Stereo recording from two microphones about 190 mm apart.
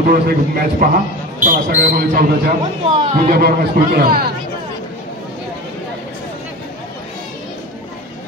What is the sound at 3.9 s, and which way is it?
Speech, 50° right (ahead or behind).